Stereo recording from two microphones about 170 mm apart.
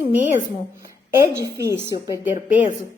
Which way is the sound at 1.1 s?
15° right (ahead or behind).